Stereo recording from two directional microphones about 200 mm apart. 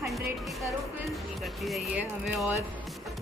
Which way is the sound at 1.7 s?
5° right (ahead or behind).